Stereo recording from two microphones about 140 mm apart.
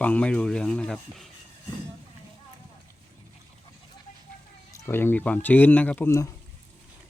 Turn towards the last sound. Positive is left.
turn(degrees=20)  # may be behind; listen again after turning